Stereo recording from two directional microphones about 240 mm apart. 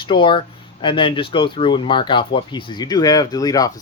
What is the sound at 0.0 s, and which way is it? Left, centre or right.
Speech, left.